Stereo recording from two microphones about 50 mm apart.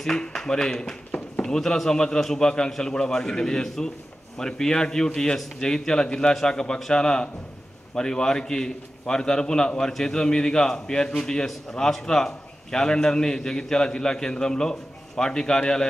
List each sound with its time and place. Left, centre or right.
0.0 s a man's voice: centre